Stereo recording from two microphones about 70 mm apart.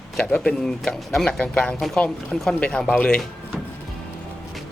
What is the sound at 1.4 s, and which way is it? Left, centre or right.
Speech, centre.